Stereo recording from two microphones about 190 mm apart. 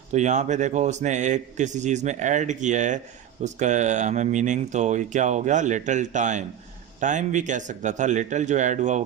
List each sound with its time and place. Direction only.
0.1 s speech: 40° right (ahead or behind)